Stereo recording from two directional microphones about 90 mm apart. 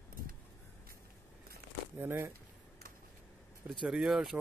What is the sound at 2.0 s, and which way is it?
Speech, 25° right (ahead or behind).